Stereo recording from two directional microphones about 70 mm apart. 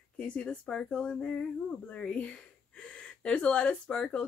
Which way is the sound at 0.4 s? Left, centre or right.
Centre.